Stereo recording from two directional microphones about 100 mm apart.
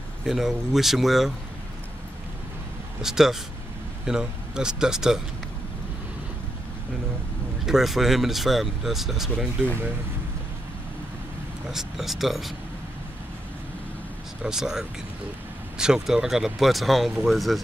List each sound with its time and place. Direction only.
0.2 s speech: 5° right (ahead or behind)
3.0 s speech: 5° right (ahead or behind)
7.6 s speech: 5° right (ahead or behind)
11.7 s speech: 5° right (ahead or behind)
14.4 s speech: 5° right (ahead or behind)